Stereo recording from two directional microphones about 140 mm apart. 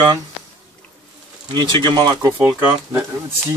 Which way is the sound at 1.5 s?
35° right (ahead or behind).